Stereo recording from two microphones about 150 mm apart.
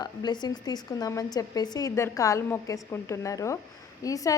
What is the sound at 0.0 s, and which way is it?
A woman's voice, 25° left (ahead or behind).